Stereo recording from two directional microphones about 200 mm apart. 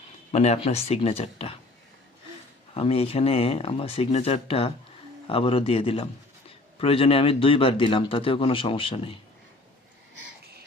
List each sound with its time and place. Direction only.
0.3 s speech: 30° left (ahead or behind)
2.7 s a man's voice: 30° left (ahead or behind)